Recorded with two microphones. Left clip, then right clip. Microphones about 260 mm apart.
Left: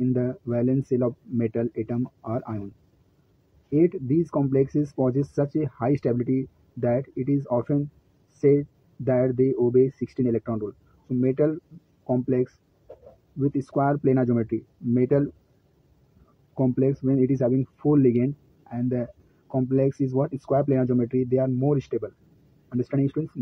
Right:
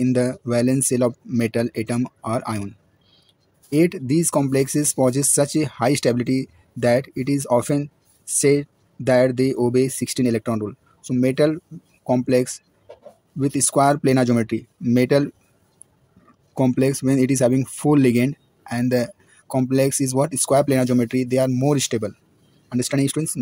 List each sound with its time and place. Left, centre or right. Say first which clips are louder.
0.0 s speech: right 6 dB; right
3.7 s speech: right 3 dB; right
16.5 s speech: right 4 dB; right